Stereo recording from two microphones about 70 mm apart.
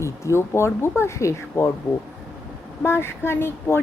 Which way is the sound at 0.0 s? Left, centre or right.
Left.